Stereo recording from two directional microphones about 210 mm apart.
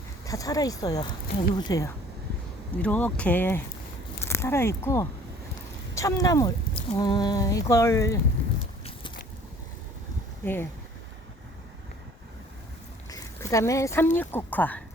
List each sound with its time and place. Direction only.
0.3 s speech: 15° left (ahead or behind)
10.4 s speech: 10° left (ahead or behind)
13.1 s speech: 15° left (ahead or behind)